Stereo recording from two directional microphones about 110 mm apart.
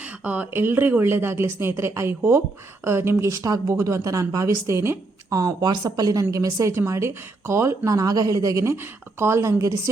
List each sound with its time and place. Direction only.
0.0 s speech: 15° right (ahead or behind)